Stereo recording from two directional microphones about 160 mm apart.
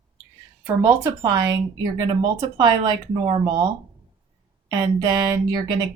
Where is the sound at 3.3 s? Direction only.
25° right (ahead or behind).